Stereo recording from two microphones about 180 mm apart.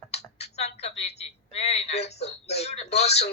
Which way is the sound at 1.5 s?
35° left (ahead or behind).